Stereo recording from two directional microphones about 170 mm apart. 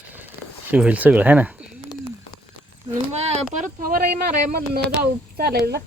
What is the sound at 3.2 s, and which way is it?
Speech, 40° right (ahead or behind).